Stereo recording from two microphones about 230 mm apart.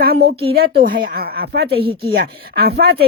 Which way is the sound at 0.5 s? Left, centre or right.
Right.